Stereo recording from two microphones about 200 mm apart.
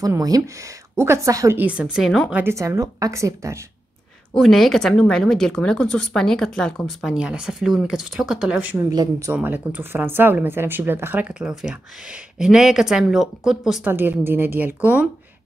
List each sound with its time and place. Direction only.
0.0 s speech: 20° right (ahead or behind); by 2.4 s centre (ahead or behind)
2.4 s speech: 15° right (ahead or behind)
4.3 s a woman's voice: centre (ahead or behind)
8.9 s speech: 20° right (ahead or behind)
9.3 s a woman's voice: 10° right (ahead or behind)